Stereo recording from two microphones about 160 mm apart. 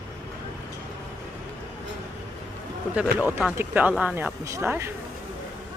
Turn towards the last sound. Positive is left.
turn(degrees=-15)  # may be behind; listen again after turning